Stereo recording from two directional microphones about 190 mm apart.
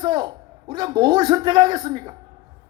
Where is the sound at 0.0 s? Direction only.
20° right (ahead or behind).